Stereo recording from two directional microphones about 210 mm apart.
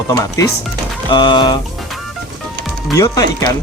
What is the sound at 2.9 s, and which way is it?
Speech, 15° left (ahead or behind).